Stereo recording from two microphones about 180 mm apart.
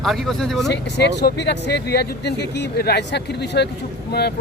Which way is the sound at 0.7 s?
70° left (ahead or behind).